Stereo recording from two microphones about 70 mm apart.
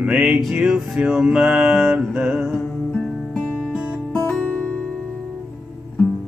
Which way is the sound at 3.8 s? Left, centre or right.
Centre.